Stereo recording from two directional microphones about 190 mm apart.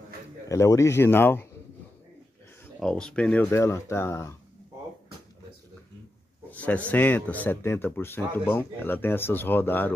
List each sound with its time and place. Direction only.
0.5 s speech: 15° left (ahead or behind)
2.6 s speech: 5° left (ahead or behind)
6.5 s speech: 10° left (ahead or behind)